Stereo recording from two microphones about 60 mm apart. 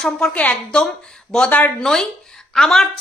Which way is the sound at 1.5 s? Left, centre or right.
Left.